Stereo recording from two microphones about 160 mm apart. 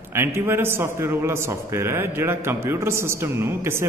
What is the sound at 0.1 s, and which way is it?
A man's voice, 15° right (ahead or behind).